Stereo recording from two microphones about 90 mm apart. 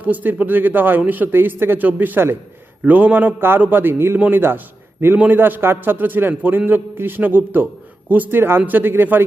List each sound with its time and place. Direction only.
0.0 s speech: 20° right (ahead or behind)